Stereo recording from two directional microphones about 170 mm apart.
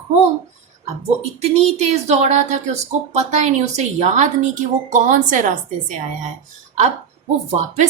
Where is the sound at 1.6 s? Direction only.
40° right (ahead or behind).